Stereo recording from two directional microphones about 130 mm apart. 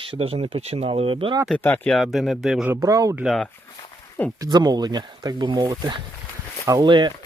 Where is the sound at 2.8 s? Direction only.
25° right (ahead or behind).